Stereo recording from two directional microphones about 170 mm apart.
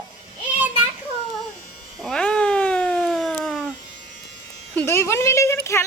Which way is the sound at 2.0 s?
5° left (ahead or behind).